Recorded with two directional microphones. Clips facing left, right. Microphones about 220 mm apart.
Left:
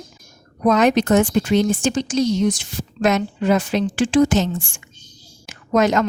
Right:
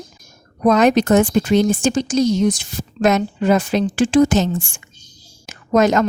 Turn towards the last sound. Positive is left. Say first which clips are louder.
# right 2 dB
turn(degrees=-45)  # may be behind; listen again after turning